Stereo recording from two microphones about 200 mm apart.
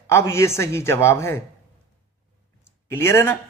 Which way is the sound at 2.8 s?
15° left (ahead or behind).